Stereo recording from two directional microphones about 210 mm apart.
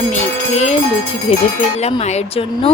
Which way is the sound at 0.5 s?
30° left (ahead or behind).